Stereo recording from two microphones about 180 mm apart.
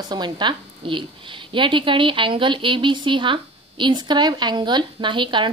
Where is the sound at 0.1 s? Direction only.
25° right (ahead or behind).